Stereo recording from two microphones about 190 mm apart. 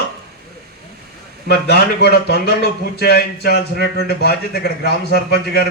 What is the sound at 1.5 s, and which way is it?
A man's voice, 55° left (ahead or behind).